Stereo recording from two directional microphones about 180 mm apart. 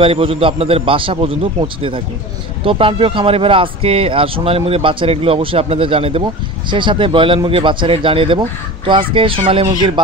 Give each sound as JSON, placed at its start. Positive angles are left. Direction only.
{"t": 0.0, "sound": "speech", "side_deg": -30}